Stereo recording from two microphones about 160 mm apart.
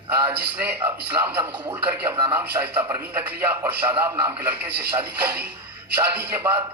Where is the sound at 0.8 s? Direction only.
15° right (ahead or behind).